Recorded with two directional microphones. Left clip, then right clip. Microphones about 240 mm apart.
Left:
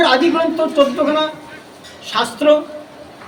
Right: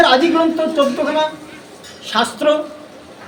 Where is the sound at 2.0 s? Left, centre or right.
Centre.